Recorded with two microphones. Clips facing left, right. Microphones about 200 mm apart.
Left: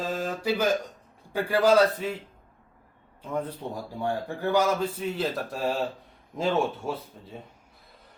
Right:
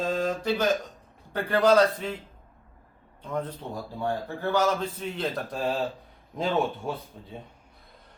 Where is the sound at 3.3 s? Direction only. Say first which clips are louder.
Left 1 dB; 10° left (ahead or behind).